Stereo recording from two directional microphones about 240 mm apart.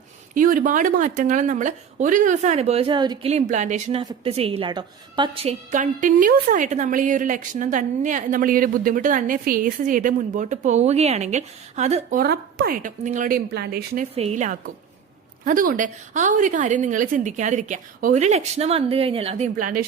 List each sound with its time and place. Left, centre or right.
0.3 s a woman's voice: right
14.0 s a woman's voice: right